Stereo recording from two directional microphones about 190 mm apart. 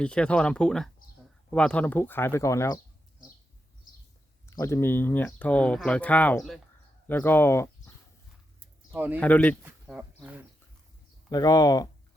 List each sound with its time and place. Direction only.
0.0 s speech: 5° left (ahead or behind)
4.4 s speech: 15° left (ahead or behind)
9.0 s speech: 10° right (ahead or behind)
9.2 s speech: 10° left (ahead or behind)
9.8 s speech: 10° right (ahead or behind)
11.3 s speech: 20° left (ahead or behind)